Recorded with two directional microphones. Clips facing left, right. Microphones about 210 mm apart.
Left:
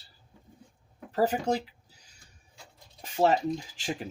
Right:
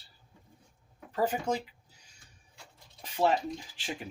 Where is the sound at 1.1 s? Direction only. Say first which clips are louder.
Left 3 dB; 40° left (ahead or behind).